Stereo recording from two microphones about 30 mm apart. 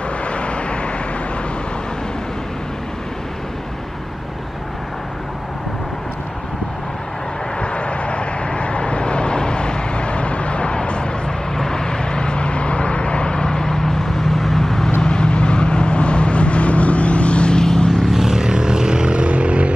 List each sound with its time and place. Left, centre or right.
0.2 s vehicle: left
7.6 s vehicle: left; by 14.9 s centre
15.0 s vehicle: left
17.6 s vehicle: left
18.1 s vehicle: centre; by 19.7 s right